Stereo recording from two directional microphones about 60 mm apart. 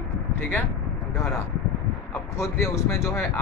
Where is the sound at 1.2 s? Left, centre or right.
Left.